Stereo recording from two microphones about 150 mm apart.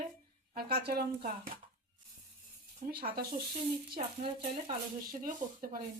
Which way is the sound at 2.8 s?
85° right.